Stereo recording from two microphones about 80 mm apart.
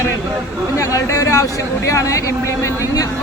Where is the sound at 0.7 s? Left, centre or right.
Left.